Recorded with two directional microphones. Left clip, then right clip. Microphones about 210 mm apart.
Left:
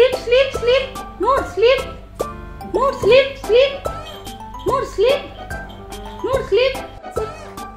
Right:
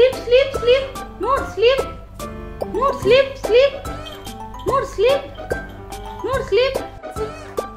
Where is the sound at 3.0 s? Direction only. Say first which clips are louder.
Left 2 dB; 35° left (ahead or behind).